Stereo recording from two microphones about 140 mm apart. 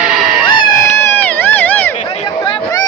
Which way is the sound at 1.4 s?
15° left (ahead or behind).